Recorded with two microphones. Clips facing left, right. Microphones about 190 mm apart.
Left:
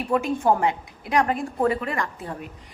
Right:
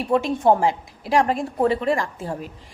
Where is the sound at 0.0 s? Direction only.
30° right (ahead or behind).